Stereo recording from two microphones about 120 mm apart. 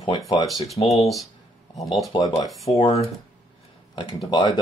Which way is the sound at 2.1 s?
35° left (ahead or behind).